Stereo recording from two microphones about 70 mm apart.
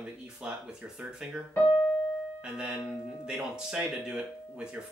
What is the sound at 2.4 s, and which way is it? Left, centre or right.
Speech, centre.